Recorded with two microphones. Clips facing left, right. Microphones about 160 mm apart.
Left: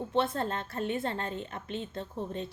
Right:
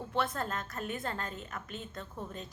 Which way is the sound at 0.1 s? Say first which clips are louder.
Left 4 dB; 25° left (ahead or behind).